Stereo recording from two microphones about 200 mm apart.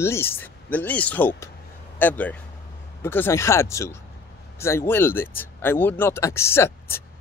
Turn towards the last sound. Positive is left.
turn(degrees=10)  # may be behind; listen again after turning